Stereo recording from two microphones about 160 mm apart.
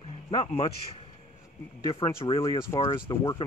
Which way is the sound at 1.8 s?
30° left (ahead or behind).